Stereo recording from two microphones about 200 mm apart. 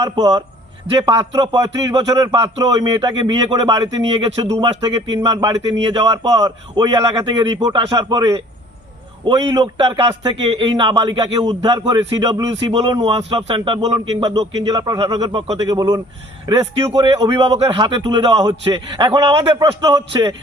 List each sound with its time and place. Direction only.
0.0 s a man's voice: 20° right (ahead or behind)